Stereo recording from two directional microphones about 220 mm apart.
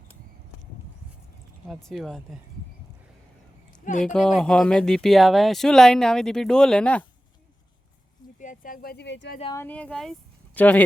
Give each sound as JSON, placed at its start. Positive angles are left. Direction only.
{"t": 1.6, "sound": "speech", "side_deg": 0}
{"t": 4.0, "sound": "speech", "side_deg": 5}
{"t": 8.4, "sound": "speech", "side_deg": 35}
{"t": 9.4, "sound": "speech", "side_deg": 20}
{"t": 9.6, "sound": "speech", "side_deg": 5}